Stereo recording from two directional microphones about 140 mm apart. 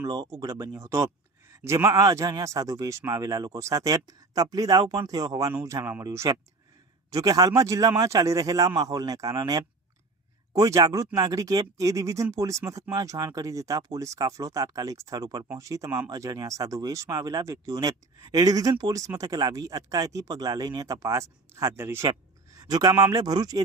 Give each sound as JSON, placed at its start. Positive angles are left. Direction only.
{"t": 0.0, "sound": "speech", "side_deg": -25}